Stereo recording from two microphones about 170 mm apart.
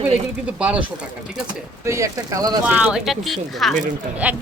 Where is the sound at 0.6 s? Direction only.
5° right (ahead or behind).